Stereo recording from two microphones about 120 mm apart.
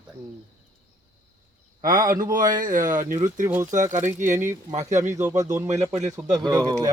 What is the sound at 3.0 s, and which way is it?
Speech, 90° right.